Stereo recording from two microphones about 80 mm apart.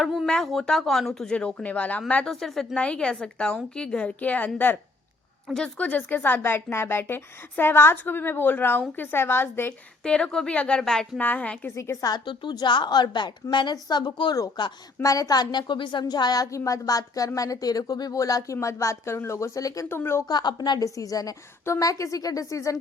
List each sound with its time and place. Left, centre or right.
0.0 s a sound: centre
0.3 s speech: centre
2.3 s a woman's voice: centre
2.7 s speech: centre
10.0 s speech: centre
11.2 s speech: centre
11.8 s a woman's voice: left
12.1 s a woman's voice: left
14.3 s a woman's voice: left
19.9 s speech: left
20.2 s a woman's voice: left
20.8 s a woman's voice: left